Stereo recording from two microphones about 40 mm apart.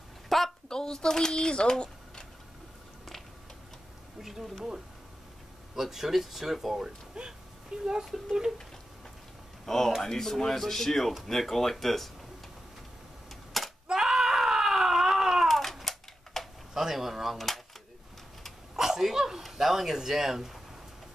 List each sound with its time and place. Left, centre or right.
0.3 s a sound: centre
0.7 s speech: centre
4.2 s speech: centre
7.2 s speech: centre
9.7 s speech: centre
13.5 s a sound: centre
13.9 s baby cry: centre
15.4 s a sound: centre
16.7 s speech: centre
18.8 s sneeze: centre
19.4 s a man's voice: centre